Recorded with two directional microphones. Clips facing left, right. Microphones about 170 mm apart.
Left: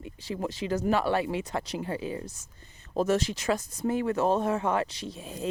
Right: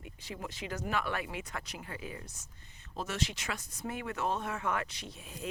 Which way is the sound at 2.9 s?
45° left (ahead or behind).